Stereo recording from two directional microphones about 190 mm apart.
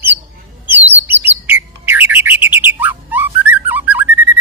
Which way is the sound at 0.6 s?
10° right (ahead or behind).